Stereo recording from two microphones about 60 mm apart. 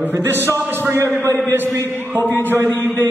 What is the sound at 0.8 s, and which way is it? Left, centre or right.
Speech, right.